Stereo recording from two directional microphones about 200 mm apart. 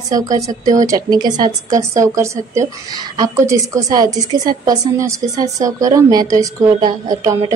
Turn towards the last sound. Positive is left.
turn(degrees=-15)  # may be behind; listen again after turning